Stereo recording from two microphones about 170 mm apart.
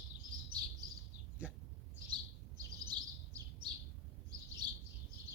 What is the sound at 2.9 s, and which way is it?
Bird, 25° right (ahead or behind).